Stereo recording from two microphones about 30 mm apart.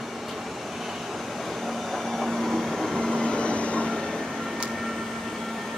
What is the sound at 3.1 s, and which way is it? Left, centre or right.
Vehicle, left.